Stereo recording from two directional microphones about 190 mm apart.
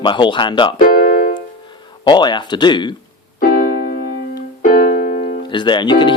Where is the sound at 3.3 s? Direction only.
45° left (ahead or behind).